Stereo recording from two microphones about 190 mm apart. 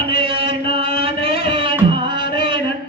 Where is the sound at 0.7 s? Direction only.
30° right (ahead or behind).